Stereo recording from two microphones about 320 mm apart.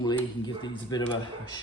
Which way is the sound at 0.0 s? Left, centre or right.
Centre.